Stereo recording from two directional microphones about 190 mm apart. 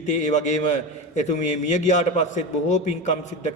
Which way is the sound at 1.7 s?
40° left (ahead or behind).